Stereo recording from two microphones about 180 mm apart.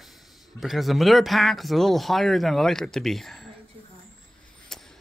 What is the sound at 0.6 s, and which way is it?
Speech, centre (ahead or behind).